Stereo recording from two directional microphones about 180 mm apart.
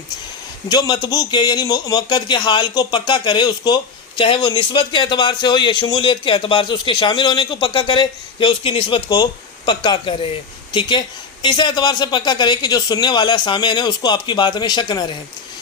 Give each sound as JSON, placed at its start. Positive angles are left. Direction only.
{"t": 0.7, "sound": "a man's voice", "side_deg": 25}